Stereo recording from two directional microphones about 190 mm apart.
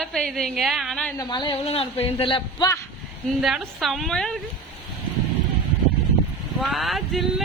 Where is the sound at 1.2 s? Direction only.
25° left (ahead or behind).